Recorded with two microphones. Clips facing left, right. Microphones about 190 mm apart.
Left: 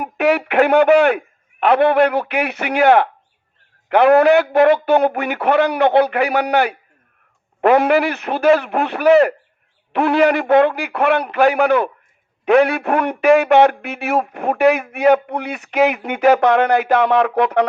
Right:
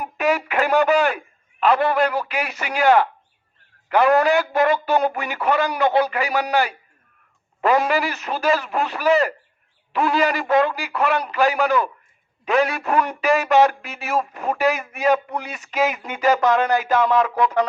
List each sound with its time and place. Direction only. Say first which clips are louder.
0.0 s speech: left 5 dB; 60° left (ahead or behind)